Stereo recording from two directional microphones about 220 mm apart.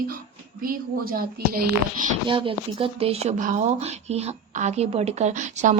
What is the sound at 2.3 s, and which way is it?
Speech, 25° right (ahead or behind).